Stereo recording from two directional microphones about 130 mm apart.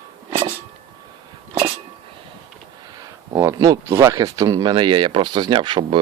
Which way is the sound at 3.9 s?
20° right (ahead or behind).